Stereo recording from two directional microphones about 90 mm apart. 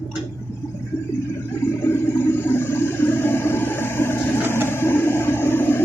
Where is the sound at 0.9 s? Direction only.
30° left (ahead or behind).